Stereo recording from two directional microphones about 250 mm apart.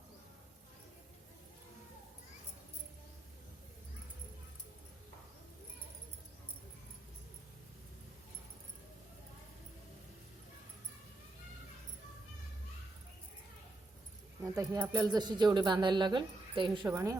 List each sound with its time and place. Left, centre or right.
14.4 s speech: centre